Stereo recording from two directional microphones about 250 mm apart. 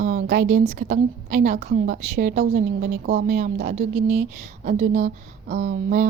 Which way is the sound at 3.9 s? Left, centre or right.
Right.